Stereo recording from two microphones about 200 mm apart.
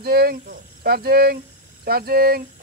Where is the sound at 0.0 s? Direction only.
50° right (ahead or behind).